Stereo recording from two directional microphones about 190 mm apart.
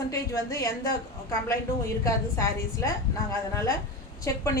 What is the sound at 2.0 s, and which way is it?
A woman's voice, 15° left (ahead or behind).